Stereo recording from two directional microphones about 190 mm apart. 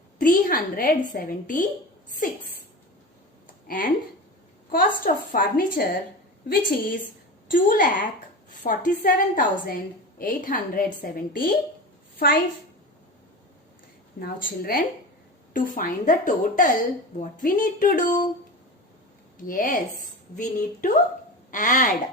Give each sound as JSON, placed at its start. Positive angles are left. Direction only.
{"t": 0.2, "sound": "a woman's voice", "side_deg": 50}
{"t": 3.7, "sound": "a woman's voice", "side_deg": 45}
{"t": 14.2, "sound": "a woman's voice", "side_deg": 50}
{"t": 19.5, "sound": "a woman's voice", "side_deg": 50}